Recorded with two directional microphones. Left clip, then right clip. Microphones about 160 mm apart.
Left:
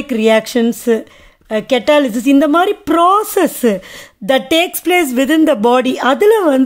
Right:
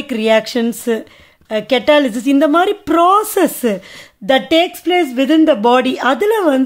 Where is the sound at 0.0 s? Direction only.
20° left (ahead or behind).